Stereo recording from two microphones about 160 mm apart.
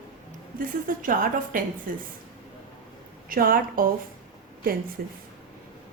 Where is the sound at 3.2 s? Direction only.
65° right (ahead or behind).